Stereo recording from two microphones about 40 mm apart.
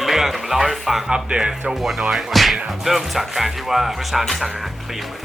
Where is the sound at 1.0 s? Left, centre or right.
Right.